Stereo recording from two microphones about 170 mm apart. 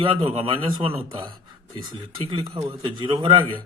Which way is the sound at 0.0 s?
35° right (ahead or behind).